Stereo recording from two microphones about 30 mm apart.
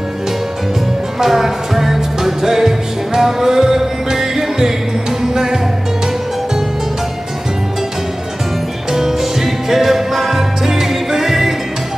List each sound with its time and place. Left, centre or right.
1.2 s music: centre
8.9 s music: centre